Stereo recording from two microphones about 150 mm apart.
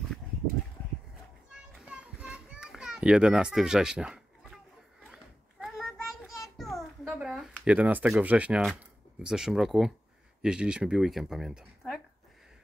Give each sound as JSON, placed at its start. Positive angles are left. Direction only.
{"t": 1.9, "sound": "children playing", "side_deg": -5}
{"t": 5.0, "sound": "a sound", "side_deg": 0}
{"t": 9.2, "sound": "speech", "side_deg": -5}